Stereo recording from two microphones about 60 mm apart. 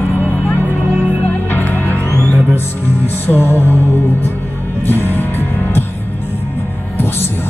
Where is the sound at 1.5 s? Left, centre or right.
Left.